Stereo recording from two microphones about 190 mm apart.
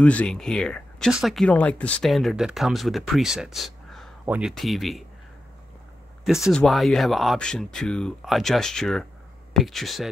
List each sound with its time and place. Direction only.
0.0 s speech: 5° left (ahead or behind)
6.5 s speech: centre (ahead or behind)